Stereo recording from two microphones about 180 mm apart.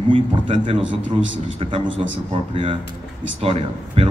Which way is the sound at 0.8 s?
90° right.